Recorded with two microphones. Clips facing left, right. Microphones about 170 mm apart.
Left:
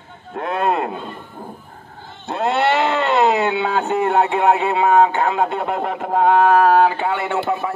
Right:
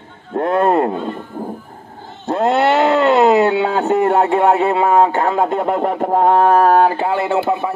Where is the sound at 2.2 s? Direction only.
40° right (ahead or behind).